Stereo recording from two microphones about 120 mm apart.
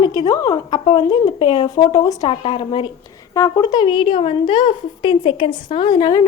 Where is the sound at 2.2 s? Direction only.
45° left (ahead or behind).